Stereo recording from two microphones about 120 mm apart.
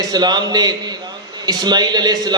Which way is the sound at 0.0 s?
35° right (ahead or behind).